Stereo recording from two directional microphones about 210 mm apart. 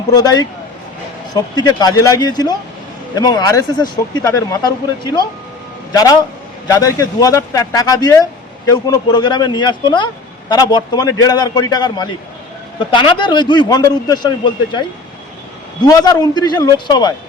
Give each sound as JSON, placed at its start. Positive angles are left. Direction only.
{"t": 0.1, "sound": "a man's voice", "side_deg": 20}
{"t": 5.9, "sound": "a man's voice", "side_deg": 15}